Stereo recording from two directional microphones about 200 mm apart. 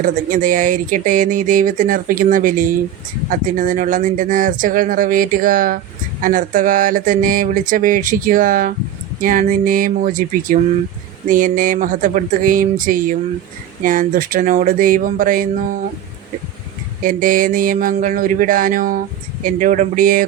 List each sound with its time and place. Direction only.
0.0 s speech: 40° right (ahead or behind)
17.0 s speech: 40° right (ahead or behind)